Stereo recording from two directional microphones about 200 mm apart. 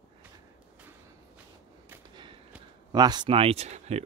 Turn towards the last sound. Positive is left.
turn(degrees=-35)  # may be behind; listen again after turning